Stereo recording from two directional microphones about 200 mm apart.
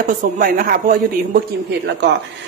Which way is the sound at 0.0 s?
45° right (ahead or behind).